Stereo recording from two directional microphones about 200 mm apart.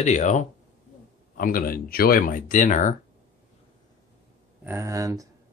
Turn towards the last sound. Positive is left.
turn(degrees=-15)  # may be behind; listen again after turning